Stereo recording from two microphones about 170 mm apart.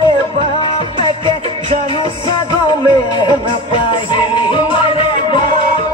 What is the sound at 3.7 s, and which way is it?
Music, 30° left (ahead or behind).